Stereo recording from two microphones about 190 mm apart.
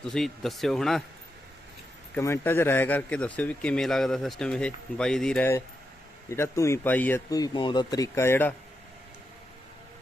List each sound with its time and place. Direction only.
0.0 s a man's voice: centre (ahead or behind)
2.1 s a man's voice: 10° left (ahead or behind)